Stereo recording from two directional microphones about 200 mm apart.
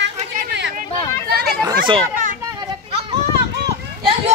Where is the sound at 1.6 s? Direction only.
25° right (ahead or behind).